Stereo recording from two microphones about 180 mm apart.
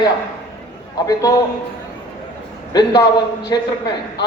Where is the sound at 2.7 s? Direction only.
20° left (ahead or behind).